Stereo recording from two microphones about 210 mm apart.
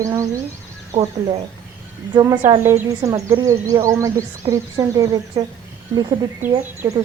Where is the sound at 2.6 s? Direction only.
15° right (ahead or behind).